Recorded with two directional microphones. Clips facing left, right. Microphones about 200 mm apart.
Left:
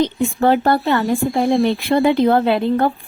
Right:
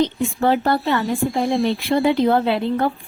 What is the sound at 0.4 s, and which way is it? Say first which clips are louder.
Speech: left 3 dB; 50° left (ahead or behind).